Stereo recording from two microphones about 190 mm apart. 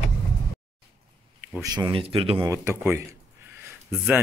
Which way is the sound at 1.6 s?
20° right (ahead or behind).